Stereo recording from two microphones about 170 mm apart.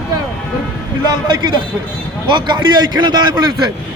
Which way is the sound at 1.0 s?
25° right (ahead or behind).